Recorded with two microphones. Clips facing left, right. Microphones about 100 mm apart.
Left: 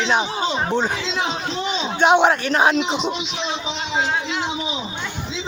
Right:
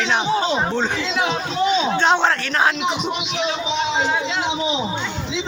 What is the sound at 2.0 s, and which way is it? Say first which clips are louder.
Speech: left 2 dB; 15° left (ahead or behind).